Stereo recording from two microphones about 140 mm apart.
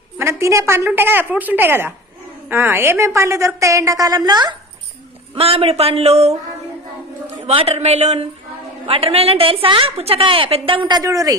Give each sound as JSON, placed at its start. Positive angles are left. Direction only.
{"t": 0.2, "sound": "a woman's voice", "side_deg": -20}
{"t": 5.3, "sound": "speech", "side_deg": -40}
{"t": 7.4, "sound": "a woman's voice", "side_deg": -45}